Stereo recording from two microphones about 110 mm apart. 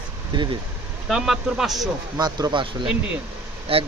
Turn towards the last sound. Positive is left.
turn(degrees=-60)  # may be behind; listen again after turning